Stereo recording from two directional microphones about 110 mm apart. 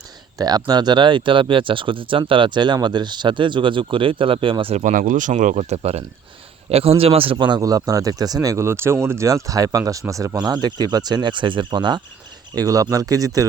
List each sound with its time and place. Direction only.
0.3 s speech: 35° right (ahead or behind)
5.3 s speech: 85° right
6.7 s a man's voice: 65° right (ahead or behind); by 13.4 s 30° right (ahead or behind)